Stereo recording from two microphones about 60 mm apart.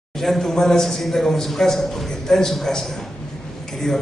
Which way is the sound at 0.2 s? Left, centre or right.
Centre.